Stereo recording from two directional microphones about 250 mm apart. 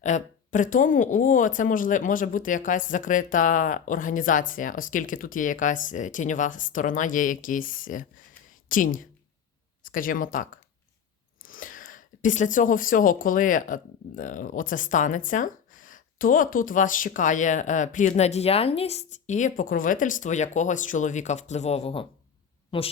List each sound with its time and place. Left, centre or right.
0.0 s speech: left